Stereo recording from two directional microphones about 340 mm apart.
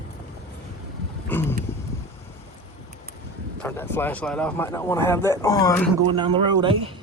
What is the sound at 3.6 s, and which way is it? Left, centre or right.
A man's voice, centre.